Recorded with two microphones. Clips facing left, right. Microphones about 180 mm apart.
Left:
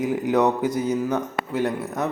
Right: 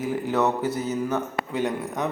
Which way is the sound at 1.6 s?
15° right (ahead or behind).